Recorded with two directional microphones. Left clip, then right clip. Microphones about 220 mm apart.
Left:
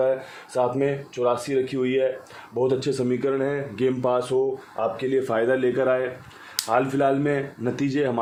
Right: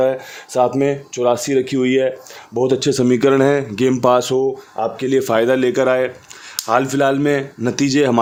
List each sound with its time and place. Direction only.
0.5 s speech: 45° right (ahead or behind)